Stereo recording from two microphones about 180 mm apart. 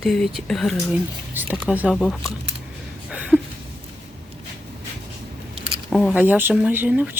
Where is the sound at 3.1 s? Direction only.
5° right (ahead or behind).